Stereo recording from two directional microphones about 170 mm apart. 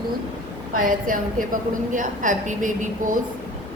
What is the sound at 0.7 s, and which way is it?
A woman's voice, 50° right (ahead or behind).